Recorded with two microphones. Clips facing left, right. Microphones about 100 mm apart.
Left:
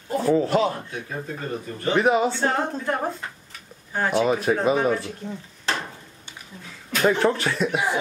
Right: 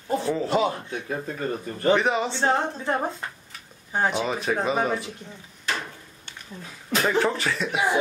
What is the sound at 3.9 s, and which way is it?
Speech, 15° right (ahead or behind).